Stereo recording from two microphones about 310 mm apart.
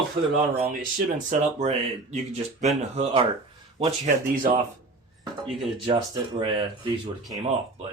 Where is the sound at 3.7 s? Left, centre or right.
Right.